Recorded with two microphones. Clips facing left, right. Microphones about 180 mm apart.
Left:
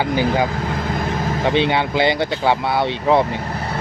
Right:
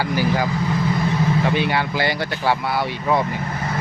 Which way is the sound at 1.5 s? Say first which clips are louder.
Left 4 dB; 20° left (ahead or behind).